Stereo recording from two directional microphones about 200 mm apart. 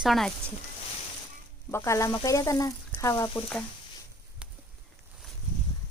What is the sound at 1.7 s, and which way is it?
Speech, 15° left (ahead or behind).